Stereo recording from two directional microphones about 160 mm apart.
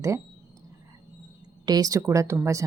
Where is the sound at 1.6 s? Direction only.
25° right (ahead or behind).